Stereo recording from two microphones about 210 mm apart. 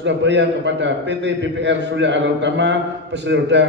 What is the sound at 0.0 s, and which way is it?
A man's voice, 60° right (ahead or behind).